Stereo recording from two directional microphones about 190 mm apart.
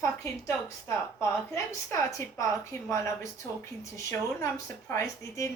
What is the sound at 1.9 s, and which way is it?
Speech, 15° left (ahead or behind).